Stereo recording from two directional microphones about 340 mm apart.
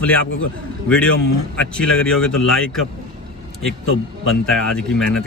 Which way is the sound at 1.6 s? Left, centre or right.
Centre.